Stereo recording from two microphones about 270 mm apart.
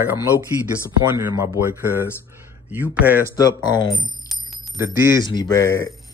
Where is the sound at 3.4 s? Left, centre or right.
Centre.